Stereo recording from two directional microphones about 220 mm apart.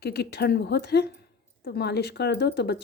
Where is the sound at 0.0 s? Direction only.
50° left (ahead or behind).